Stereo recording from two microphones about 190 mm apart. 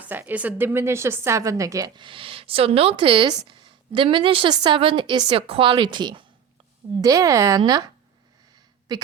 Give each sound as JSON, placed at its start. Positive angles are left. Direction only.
{"t": 0.0, "sound": "a woman's voice", "side_deg": -10}
{"t": 8.9, "sound": "a woman's voice", "side_deg": -20}